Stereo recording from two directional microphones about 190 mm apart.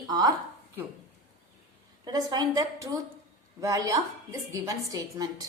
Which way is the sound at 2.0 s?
20° right (ahead or behind).